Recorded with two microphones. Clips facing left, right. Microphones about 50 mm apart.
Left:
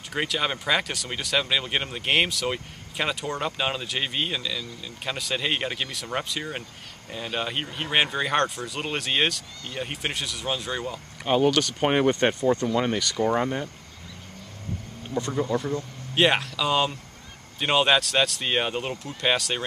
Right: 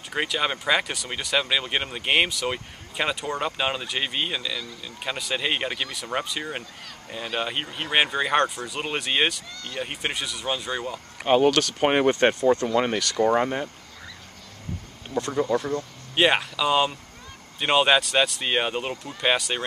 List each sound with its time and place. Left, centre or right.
0.1 s speech: centre
11.2 s speech: centre
15.3 s speech: centre